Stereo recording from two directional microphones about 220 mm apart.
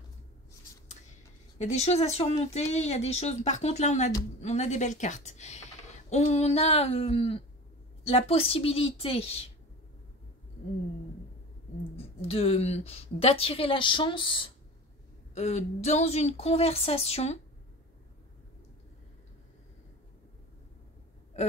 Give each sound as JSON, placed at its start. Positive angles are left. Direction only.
{"t": 1.6, "sound": "a woman's voice", "side_deg": 30}
{"t": 12.0, "sound": "a woman's voice", "side_deg": 25}
{"t": 21.4, "sound": "a sound", "side_deg": 30}